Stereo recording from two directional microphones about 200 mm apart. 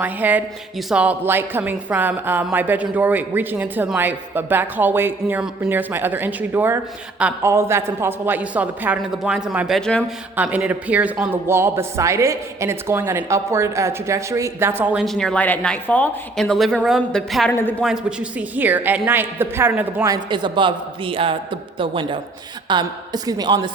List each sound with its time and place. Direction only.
0.0 s a man's voice: 10° right (ahead or behind); by 17.8 s 10° left (ahead or behind)
17.8 s speech: 5° right (ahead or behind)
20.3 s a man's voice: 25° right (ahead or behind)